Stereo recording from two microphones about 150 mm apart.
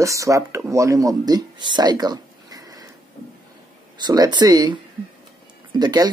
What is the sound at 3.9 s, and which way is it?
Speech, 30° right (ahead or behind).